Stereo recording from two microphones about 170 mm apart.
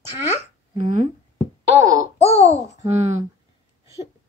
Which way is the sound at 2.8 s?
40° right (ahead or behind).